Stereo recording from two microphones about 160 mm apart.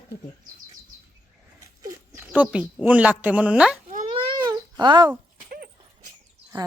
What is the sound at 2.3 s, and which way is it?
Speech, 10° right (ahead or behind).